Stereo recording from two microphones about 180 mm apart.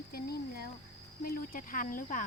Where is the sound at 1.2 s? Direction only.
50° left (ahead or behind).